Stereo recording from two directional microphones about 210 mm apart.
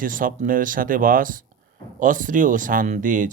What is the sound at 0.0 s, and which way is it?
Speech, 40° right (ahead or behind).